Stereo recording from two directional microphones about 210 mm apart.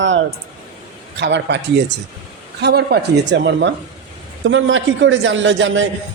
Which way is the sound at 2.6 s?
50° right (ahead or behind).